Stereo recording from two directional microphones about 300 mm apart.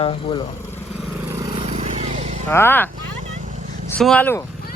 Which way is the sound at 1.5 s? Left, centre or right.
Centre.